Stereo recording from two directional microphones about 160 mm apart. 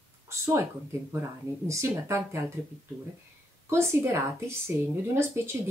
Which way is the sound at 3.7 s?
15° right (ahead or behind).